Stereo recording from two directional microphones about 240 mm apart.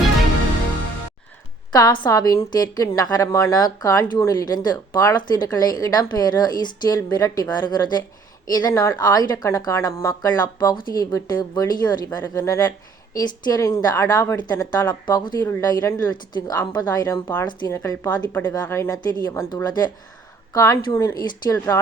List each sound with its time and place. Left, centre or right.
1.7 s a woman's voice: centre